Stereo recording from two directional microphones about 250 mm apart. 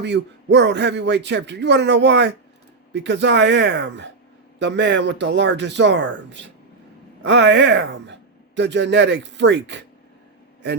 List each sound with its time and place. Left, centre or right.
0.0 s speech: right